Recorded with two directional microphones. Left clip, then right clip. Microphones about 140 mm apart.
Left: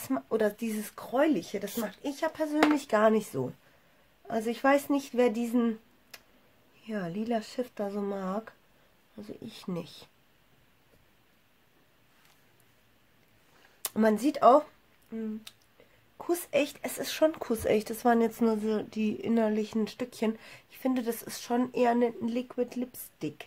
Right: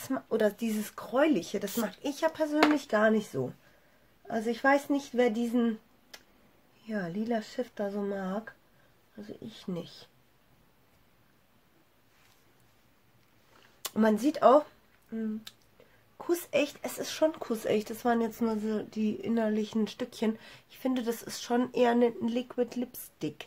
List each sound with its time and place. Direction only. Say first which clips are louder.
0.0 s speech: even; 20° left (ahead or behind)
13.8 s speech: left 1 dB; 10° left (ahead or behind)